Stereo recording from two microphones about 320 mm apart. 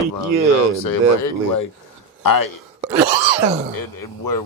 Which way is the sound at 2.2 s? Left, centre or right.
Left.